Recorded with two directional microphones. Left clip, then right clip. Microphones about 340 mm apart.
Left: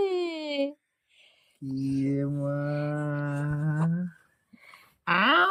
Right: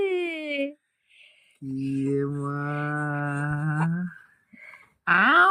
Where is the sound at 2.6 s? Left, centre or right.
Centre.